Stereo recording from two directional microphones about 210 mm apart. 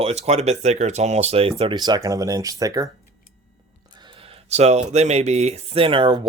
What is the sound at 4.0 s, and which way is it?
Speech, 25° right (ahead or behind).